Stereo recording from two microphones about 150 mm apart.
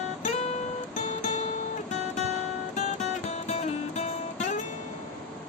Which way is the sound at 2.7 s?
50° left (ahead or behind).